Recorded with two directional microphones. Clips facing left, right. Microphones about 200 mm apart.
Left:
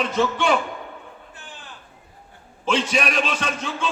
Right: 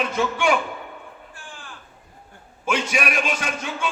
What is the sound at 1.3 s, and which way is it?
Sheep, 20° left (ahead or behind).